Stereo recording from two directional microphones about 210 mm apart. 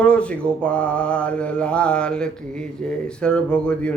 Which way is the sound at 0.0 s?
5° left (ahead or behind).